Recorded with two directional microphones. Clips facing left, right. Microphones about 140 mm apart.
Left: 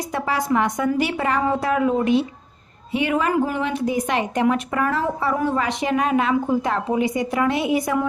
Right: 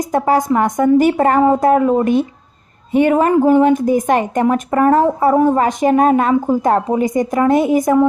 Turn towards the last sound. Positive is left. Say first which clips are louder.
# right 8 dB
turn(degrees=-45)  # may be behind; listen again after turning